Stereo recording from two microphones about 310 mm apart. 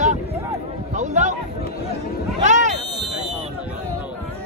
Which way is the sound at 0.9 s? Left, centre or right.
Right.